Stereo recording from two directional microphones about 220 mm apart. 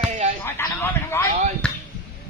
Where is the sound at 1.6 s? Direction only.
5° left (ahead or behind).